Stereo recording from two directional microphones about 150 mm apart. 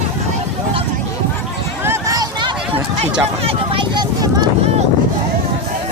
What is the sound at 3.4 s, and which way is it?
Speech, 35° right (ahead or behind).